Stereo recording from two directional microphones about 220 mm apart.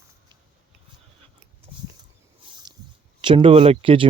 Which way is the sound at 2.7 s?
20° right (ahead or behind).